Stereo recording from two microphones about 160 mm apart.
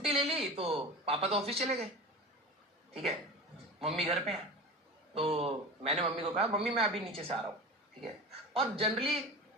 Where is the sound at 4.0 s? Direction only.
40° right (ahead or behind).